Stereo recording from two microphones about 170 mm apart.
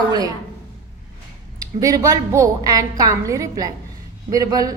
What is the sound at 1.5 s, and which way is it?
A woman's voice, 20° right (ahead or behind).